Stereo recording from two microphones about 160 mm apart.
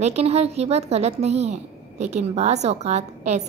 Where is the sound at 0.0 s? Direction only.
40° right (ahead or behind).